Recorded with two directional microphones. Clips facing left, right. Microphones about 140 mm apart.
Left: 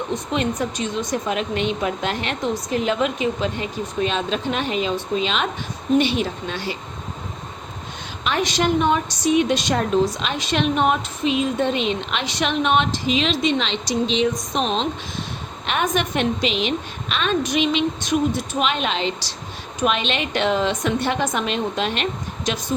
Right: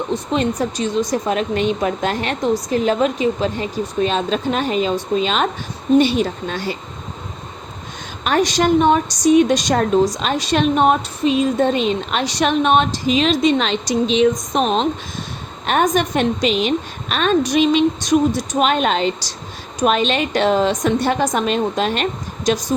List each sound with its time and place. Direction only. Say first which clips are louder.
0.3 s a woman's voice: right 3 dB; 35° right (ahead or behind)
8.2 s a woman's voice: right 5 dB; 40° right (ahead or behind)